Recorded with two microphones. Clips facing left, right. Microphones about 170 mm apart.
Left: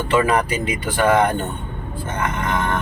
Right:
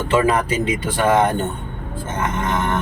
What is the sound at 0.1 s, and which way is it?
Speech, 25° right (ahead or behind).